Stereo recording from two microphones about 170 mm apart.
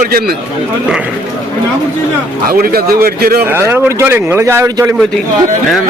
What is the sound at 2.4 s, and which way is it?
A man's voice, 60° right (ahead or behind).